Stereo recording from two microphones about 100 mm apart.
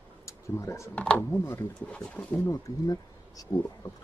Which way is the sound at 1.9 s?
10° left (ahead or behind).